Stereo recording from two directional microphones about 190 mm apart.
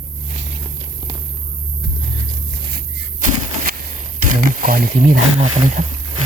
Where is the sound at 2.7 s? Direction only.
45° right (ahead or behind).